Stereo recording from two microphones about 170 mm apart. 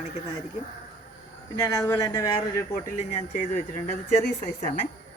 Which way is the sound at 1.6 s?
15° left (ahead or behind).